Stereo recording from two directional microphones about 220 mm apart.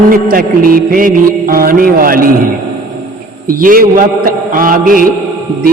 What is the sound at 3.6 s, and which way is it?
Mantra, 40° right (ahead or behind).